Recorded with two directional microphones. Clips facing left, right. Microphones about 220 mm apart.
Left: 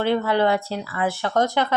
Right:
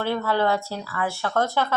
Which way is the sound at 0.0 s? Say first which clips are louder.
Left 3 dB; 20° left (ahead or behind).